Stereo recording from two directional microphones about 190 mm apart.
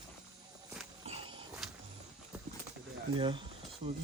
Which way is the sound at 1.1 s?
30° right (ahead or behind).